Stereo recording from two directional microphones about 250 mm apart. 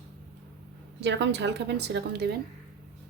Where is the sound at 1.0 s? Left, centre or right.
Right.